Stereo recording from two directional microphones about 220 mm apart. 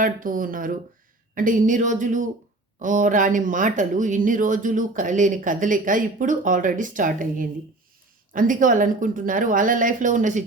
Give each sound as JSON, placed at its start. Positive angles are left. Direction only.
{"t": 0.0, "sound": "speech", "side_deg": -40}